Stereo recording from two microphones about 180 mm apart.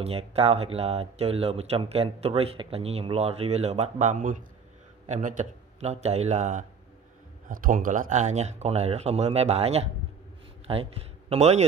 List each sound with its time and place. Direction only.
0.0 s speech: 35° right (ahead or behind)